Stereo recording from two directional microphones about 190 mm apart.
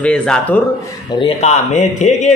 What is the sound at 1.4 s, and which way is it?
Speech, 35° left (ahead or behind).